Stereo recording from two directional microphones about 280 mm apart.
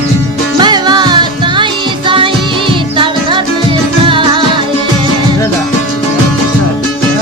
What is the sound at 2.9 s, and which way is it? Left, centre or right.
Music, centre.